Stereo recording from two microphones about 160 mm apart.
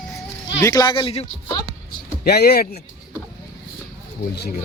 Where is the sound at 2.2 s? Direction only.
80° left.